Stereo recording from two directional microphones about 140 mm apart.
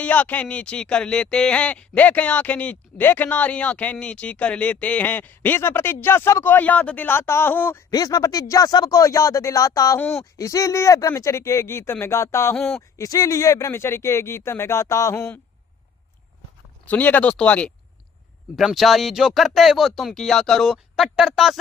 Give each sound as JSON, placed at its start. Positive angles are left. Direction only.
{"t": 0.0, "sound": "speech", "side_deg": 10}
{"t": 7.9, "sound": "speech", "side_deg": 25}
{"t": 12.5, "sound": "speech", "side_deg": 10}
{"t": 12.9, "sound": "speech", "side_deg": 25}
{"t": 16.8, "sound": "speech", "side_deg": 10}